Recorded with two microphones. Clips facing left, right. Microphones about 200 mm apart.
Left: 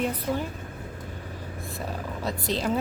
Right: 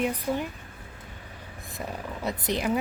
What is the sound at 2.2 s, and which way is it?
Speech, 15° right (ahead or behind).